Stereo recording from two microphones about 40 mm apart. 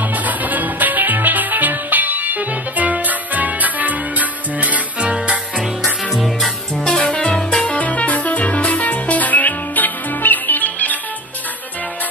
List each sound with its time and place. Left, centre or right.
0.0 s music: right
5.1 s music: right
5.6 s music: centre
6.8 s music: centre; by 11.0 s left